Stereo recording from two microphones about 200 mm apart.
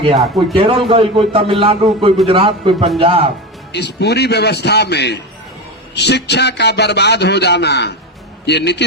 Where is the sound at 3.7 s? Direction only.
55° left (ahead or behind).